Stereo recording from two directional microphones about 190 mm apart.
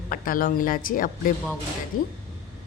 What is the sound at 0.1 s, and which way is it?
A woman's voice, 50° left (ahead or behind).